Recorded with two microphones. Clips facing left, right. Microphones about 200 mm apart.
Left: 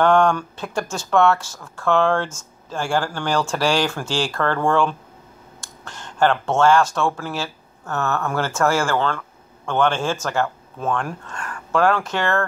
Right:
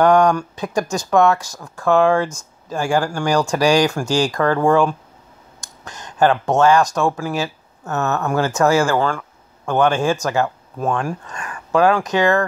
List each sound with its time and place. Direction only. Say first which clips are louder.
0.0 s speech: right 3 dB; 15° right (ahead or behind)